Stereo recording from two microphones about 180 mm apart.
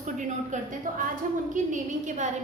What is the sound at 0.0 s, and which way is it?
A woman's voice, 45° right (ahead or behind).